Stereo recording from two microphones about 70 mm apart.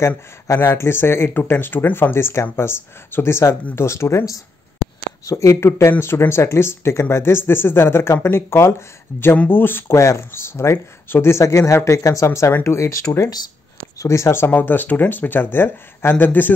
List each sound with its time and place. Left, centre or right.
0.7 s speech: left
5.2 s speech: left
9.9 s speech: left